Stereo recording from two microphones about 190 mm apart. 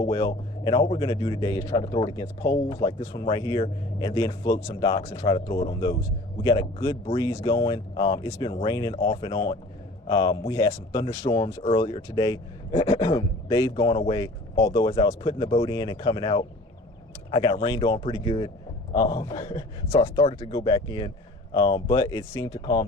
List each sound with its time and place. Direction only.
0.0 s a man's voice: 25° left (ahead or behind)